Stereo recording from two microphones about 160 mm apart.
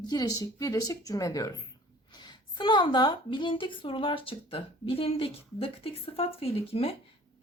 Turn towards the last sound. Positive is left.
turn(degrees=40)  # may be behind; listen again after turning